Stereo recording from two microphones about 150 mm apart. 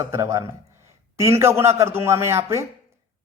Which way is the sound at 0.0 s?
20° right (ahead or behind).